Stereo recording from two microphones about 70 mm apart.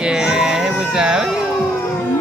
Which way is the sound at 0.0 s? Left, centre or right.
Centre.